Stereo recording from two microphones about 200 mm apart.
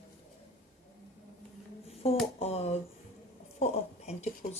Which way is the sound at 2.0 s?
30° left (ahead or behind).